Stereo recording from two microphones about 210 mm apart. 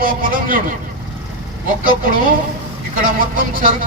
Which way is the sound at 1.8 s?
40° right (ahead or behind).